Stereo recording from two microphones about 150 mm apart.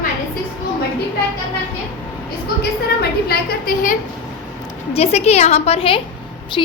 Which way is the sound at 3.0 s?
90° left.